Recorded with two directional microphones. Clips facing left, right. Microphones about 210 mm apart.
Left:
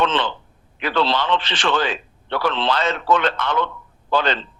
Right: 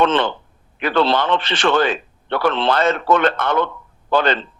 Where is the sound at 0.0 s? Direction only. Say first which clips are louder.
Right 4 dB; 55° right (ahead or behind).